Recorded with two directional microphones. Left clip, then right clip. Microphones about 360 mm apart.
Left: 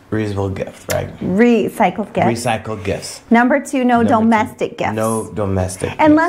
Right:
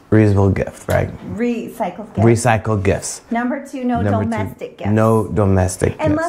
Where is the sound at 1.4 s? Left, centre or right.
Left.